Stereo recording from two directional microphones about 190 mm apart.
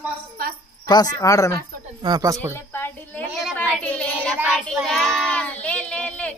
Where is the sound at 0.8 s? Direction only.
20° left (ahead or behind).